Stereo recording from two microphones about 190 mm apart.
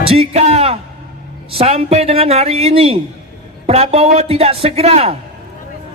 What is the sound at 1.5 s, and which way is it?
A man's voice, 30° right (ahead or behind).